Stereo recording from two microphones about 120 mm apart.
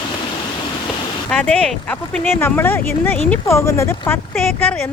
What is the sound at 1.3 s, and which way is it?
Speech, 5° left (ahead or behind).